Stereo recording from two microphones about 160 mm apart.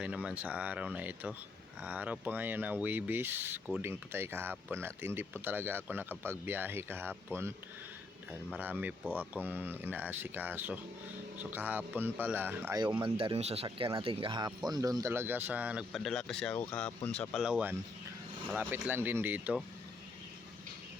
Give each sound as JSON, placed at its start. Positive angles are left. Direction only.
{"t": 0.0, "sound": "speech", "side_deg": -5}
{"t": 8.5, "sound": "speech", "side_deg": -10}
{"t": 13.0, "sound": "speech", "side_deg": -35}
{"t": 17.2, "sound": "speech", "side_deg": 0}